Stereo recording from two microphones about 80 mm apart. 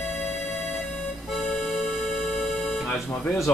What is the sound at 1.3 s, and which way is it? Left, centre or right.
Music, centre.